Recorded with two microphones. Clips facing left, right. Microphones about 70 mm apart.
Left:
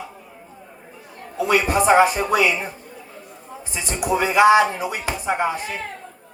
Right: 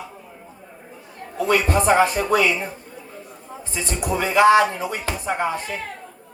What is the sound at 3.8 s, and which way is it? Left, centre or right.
Speech, centre.